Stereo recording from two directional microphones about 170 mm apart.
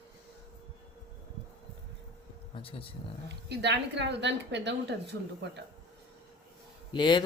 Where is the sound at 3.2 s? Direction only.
85° right.